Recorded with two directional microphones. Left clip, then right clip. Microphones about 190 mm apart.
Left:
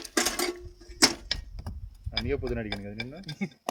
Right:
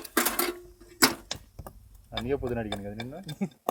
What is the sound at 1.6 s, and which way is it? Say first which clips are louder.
Speech: right 2 dB; 10° left (ahead or behind).